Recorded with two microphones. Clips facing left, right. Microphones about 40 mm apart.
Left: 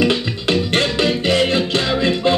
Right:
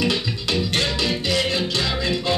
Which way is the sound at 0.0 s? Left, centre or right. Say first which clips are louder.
Left 5 dB; left.